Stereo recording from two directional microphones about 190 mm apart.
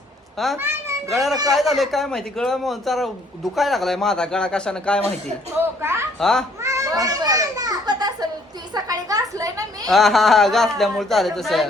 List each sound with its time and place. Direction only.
0.5 s a child's voice: 15° right (ahead or behind)
1.1 s a man's voice: centre (ahead or behind)
5.8 s a woman's voice: 15° right (ahead or behind)
6.1 s a man's voice: centre (ahead or behind)
6.6 s children playing: 15° right (ahead or behind)
8.7 s a woman's voice: 20° right (ahead or behind)
9.9 s a man's voice: centre (ahead or behind)